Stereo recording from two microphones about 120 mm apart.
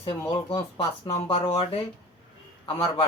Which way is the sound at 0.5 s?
35° left (ahead or behind).